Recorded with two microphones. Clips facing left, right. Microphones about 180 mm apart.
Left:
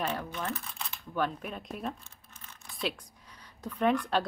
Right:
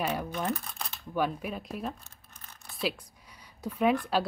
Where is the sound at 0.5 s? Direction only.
40° right (ahead or behind).